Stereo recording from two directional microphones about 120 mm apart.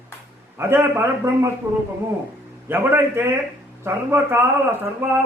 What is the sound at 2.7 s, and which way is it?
Speech, 20° right (ahead or behind).